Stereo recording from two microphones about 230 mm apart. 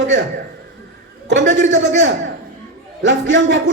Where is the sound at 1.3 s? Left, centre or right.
Right.